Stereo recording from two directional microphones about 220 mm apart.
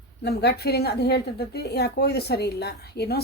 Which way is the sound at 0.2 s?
50° left (ahead or behind).